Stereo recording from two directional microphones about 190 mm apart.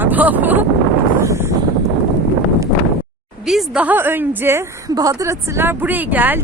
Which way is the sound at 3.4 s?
5° right (ahead or behind).